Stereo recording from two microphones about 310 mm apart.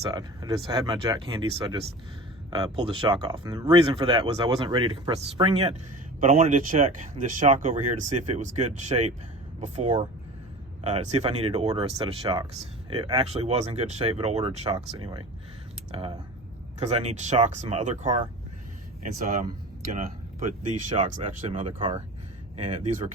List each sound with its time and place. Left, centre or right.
0.1 s speech: centre
20.7 s speech: right